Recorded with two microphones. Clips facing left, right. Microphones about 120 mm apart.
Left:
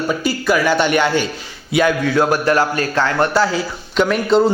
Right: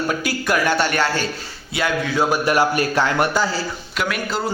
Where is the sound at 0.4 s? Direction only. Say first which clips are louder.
Left 4 dB; 5° left (ahead or behind).